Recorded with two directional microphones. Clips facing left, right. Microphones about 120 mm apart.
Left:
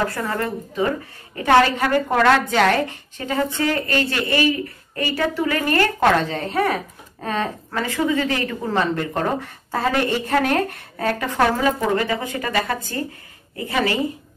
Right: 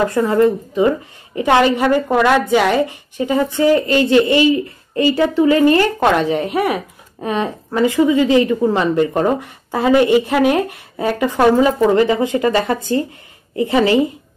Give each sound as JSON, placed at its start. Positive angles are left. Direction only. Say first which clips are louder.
{"t": 0.1, "sound": "a woman's voice", "louder": "right 11 dB", "side_deg": -20}